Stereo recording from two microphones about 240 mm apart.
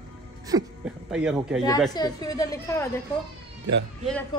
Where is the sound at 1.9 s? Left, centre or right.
Centre.